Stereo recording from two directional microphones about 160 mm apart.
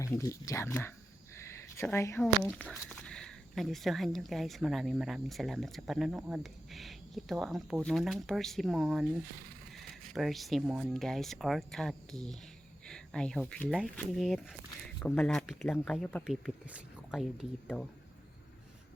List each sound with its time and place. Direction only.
0.0 s speech: 20° left (ahead or behind)
1.4 s a sound: 15° left (ahead or behind)
2.6 s speech: 5° left (ahead or behind)